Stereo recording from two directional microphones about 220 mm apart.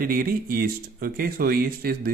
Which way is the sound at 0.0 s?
40° right (ahead or behind).